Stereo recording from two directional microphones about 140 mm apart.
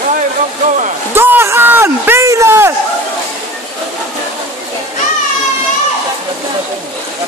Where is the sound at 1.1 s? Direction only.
15° right (ahead or behind).